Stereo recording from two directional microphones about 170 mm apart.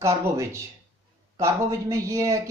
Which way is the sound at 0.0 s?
15° right (ahead or behind).